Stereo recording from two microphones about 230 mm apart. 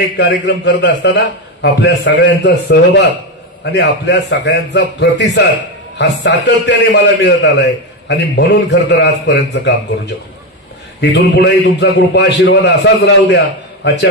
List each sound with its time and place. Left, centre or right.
0.5 s a man's voice: left
11.0 s a man's voice: left